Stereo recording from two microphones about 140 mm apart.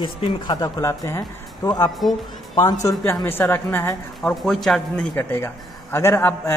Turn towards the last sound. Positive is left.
turn(degrees=15)  # may be behind; listen again after turning